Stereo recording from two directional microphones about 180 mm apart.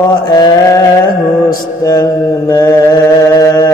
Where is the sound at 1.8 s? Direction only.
20° left (ahead or behind).